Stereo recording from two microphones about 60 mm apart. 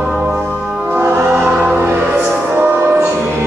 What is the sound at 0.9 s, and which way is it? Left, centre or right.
Music, right.